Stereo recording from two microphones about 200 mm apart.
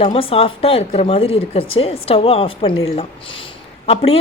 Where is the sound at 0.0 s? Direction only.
30° left (ahead or behind).